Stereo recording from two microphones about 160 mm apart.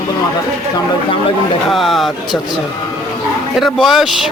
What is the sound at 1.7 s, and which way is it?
Speech, centre (ahead or behind).